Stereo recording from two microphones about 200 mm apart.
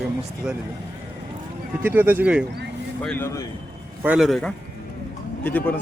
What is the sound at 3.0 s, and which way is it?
Speech, 10° left (ahead or behind).